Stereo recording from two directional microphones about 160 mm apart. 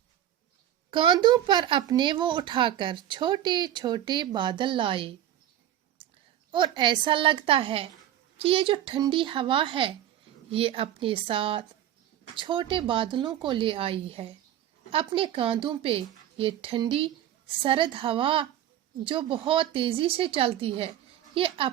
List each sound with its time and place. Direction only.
0.9 s speech: 30° right (ahead or behind)
6.7 s speech: 30° right (ahead or behind)